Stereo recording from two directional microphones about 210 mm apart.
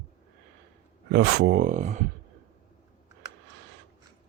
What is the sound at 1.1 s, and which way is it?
Speech, 55° right (ahead or behind).